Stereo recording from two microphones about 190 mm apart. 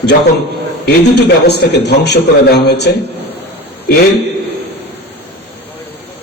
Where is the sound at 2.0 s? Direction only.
60° left (ahead or behind).